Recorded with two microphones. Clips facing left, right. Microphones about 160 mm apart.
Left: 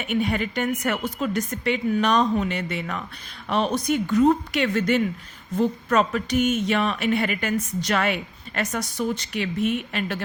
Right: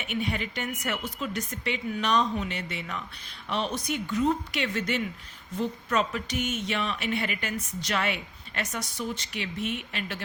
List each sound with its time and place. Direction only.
0.0 s speech: 50° left (ahead or behind)